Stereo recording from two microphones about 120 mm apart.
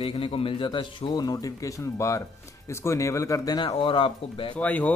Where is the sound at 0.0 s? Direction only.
50° left (ahead or behind).